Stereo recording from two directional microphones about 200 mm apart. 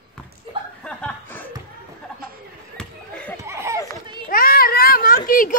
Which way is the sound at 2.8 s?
5° left (ahead or behind).